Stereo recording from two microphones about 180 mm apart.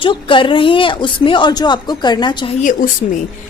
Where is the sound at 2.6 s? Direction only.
45° left (ahead or behind).